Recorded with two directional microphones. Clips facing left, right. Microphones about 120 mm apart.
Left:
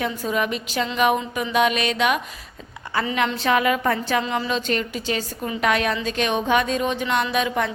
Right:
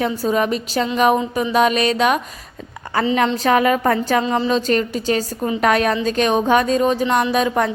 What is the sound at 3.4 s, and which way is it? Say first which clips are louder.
A woman's voice: right 4 dB; 40° right (ahead or behind).